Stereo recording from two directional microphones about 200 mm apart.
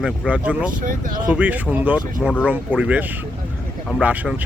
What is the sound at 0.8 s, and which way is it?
Speech, 45° right (ahead or behind).